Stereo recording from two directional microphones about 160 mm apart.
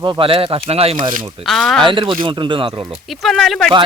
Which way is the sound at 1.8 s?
30° right (ahead or behind).